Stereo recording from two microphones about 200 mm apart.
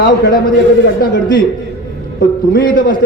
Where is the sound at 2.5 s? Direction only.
45° left (ahead or behind).